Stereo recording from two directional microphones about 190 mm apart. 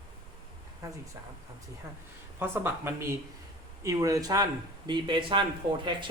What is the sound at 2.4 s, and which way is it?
Speech, 10° right (ahead or behind).